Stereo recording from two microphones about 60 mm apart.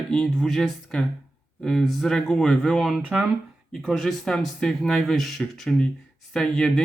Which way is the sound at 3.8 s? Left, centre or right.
Centre.